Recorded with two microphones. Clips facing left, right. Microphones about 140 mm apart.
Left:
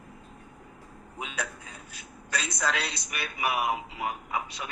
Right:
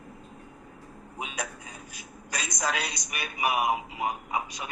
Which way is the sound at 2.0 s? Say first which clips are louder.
Left 3 dB; 15° right (ahead or behind).